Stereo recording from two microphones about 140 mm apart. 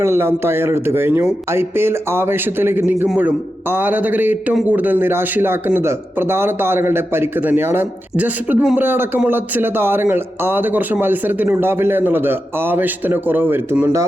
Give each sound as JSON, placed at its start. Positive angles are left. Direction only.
{"t": 0.0, "sound": "speech", "side_deg": -15}